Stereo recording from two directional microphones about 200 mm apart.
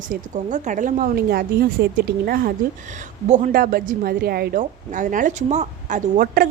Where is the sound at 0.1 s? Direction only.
40° right (ahead or behind).